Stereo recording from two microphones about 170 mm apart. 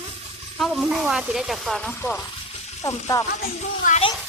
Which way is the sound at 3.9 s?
40° left (ahead or behind).